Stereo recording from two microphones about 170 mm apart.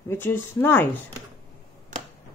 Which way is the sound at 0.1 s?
10° left (ahead or behind).